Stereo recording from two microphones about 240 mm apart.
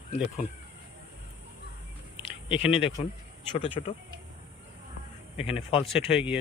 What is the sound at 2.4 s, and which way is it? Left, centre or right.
Speech, left.